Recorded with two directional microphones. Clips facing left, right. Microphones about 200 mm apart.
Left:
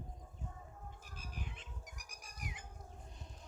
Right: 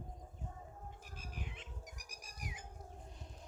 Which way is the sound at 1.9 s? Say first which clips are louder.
Right 1 dB; 35° right (ahead or behind).